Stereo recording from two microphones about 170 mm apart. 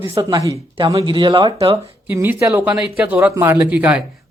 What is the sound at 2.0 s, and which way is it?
A man's voice, 10° right (ahead or behind).